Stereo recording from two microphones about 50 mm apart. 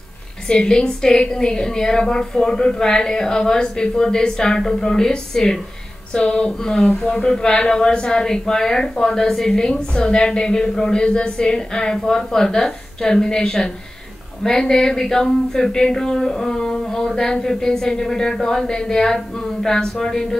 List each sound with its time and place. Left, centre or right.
0.5 s speech: centre